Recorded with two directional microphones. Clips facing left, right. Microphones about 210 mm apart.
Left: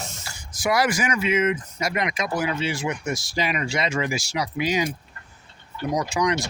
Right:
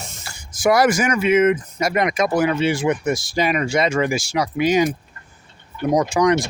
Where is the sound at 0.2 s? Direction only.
55° right (ahead or behind).